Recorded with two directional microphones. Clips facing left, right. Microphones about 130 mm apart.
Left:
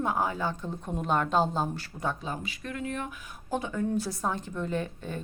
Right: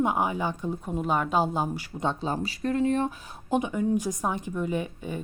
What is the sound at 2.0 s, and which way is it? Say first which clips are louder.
Speech: right 5 dB; 30° right (ahead or behind).